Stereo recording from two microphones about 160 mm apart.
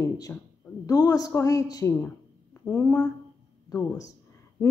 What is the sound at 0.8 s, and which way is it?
A woman's voice, 20° left (ahead or behind).